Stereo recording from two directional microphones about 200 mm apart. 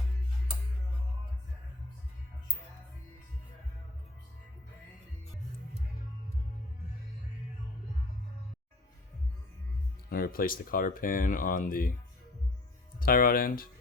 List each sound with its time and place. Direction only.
10.1 s speech: 45° left (ahead or behind)
13.0 s speech: 45° left (ahead or behind)